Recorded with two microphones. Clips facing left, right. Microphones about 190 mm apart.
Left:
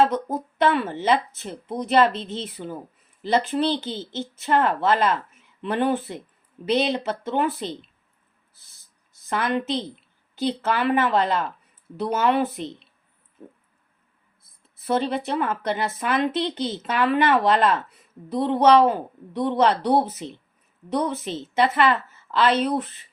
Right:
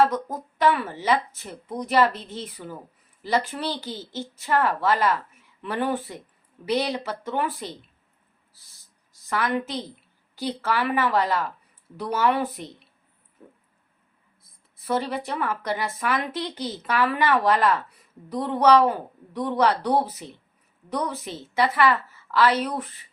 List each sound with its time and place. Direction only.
0.0 s a woman's voice: 25° left (ahead or behind)
9.3 s a woman's voice: 25° left (ahead or behind)
14.8 s a woman's voice: 25° left (ahead or behind)